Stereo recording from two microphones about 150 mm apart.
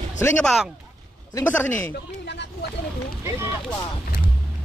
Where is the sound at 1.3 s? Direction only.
15° left (ahead or behind).